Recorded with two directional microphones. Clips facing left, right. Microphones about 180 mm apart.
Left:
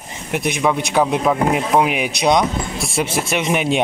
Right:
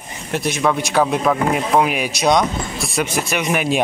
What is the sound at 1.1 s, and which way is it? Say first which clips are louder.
Speech: left 1 dB; 10° left (ahead or behind).